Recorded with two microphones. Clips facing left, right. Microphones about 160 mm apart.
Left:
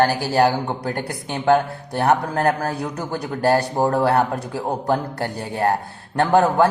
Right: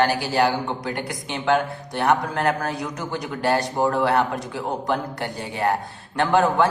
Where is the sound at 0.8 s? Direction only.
45° left (ahead or behind).